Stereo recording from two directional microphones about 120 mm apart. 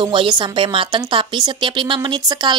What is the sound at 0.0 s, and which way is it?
A woman's voice, 45° right (ahead or behind).